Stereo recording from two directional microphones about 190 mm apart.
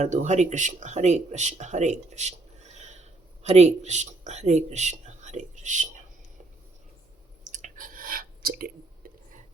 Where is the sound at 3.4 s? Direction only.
35° right (ahead or behind).